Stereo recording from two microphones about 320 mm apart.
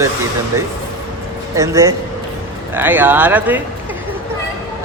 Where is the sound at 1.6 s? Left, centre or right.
Centre.